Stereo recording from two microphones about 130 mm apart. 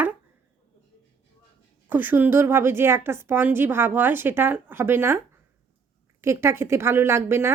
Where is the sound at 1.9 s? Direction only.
15° right (ahead or behind).